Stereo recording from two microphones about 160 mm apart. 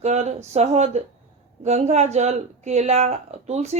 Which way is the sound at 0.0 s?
45° right (ahead or behind).